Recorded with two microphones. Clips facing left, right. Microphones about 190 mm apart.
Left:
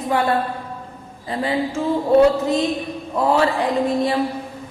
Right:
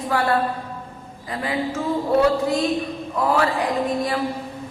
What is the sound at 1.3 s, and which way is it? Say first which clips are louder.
Speech: left 4 dB; 30° left (ahead or behind).